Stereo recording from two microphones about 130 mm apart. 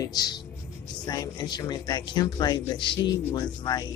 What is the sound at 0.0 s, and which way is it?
Speech, 30° left (ahead or behind).